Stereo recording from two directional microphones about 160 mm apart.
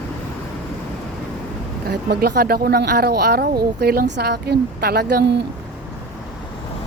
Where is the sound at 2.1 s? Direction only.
85° right.